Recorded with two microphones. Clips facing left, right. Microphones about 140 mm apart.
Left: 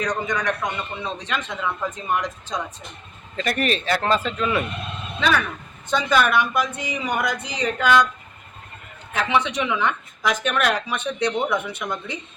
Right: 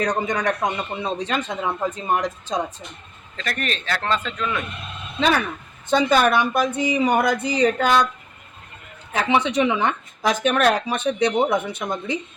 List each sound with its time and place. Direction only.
0.0 s speech: 30° right (ahead or behind)
3.3 s a man's voice: 10° left (ahead or behind)
5.9 s speech: 35° right (ahead or behind)
9.1 s speech: 35° right (ahead or behind)